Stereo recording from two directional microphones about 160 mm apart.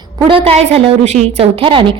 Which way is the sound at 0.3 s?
35° right (ahead or behind).